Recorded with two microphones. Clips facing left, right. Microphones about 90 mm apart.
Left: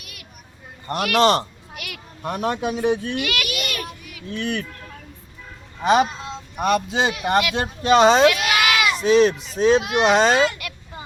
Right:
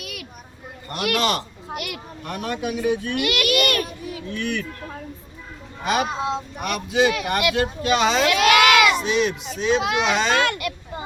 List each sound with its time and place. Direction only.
0.0 s a sound: 90° right
0.9 s speech: 35° left (ahead or behind)
1.7 s children playing: 60° right (ahead or behind)
2.2 s speech: 25° left (ahead or behind)
3.4 s child singing: 65° right (ahead or behind)
4.4 s speech: 20° left (ahead or behind)
5.8 s speech: 25° left (ahead or behind)
6.1 s speech: 80° right
6.6 s speech: 30° left (ahead or behind)
8.4 s goat: 85° right
9.0 s speech: 35° left (ahead or behind)
10.3 s a child's voice: 65° right (ahead or behind)